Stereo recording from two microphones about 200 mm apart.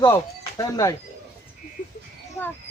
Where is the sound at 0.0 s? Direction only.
15° left (ahead or behind).